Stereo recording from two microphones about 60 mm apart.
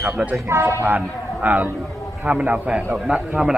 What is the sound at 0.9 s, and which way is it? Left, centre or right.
A man's voice, right.